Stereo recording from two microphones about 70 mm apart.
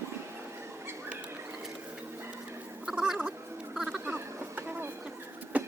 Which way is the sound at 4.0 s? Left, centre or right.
Right.